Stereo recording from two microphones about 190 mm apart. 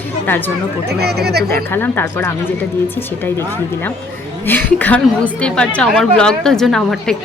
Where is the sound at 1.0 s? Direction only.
55° right (ahead or behind).